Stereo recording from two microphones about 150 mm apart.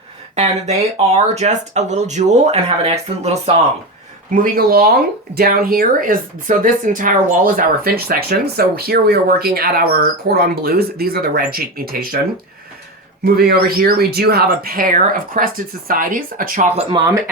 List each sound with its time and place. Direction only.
0.3 s speech: 45° right (ahead or behind)
4.3 s speech: 65° right (ahead or behind)
13.2 s speech: 90° right; by 16.7 s 65° right (ahead or behind)